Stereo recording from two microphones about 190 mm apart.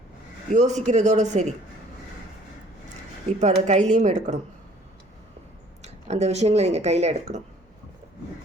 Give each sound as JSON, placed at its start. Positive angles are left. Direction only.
{"t": 0.5, "sound": "speech", "side_deg": -40}
{"t": 3.2, "sound": "speech", "side_deg": -35}
{"t": 5.8, "sound": "speech", "side_deg": -35}